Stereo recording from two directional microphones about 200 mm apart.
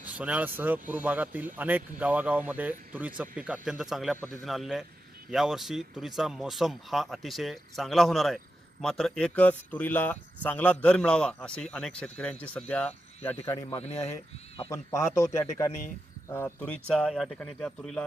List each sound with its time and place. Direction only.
0.0 s a man's voice: 5° right (ahead or behind); by 13.7 s 15° left (ahead or behind)
13.7 s speech: 30° left (ahead or behind)
14.7 s a man's voice: 15° left (ahead or behind)